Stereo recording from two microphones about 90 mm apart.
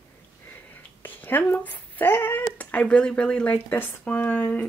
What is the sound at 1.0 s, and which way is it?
Speech, 20° left (ahead or behind).